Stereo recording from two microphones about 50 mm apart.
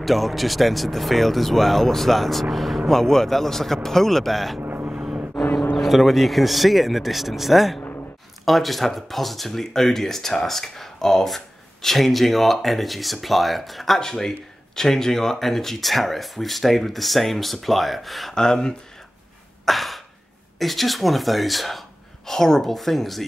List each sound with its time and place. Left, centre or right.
0.0 s speech: centre
4.6 s vehicle: right
5.4 s vehicle: centre
5.8 s speech: centre
18.3 s speech: centre
19.6 s throat clearing: centre
20.5 s speech: centre